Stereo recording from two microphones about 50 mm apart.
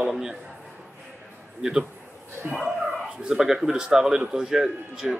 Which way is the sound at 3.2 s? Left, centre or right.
Centre.